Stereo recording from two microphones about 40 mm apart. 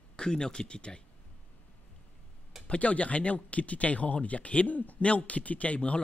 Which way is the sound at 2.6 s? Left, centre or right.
Left.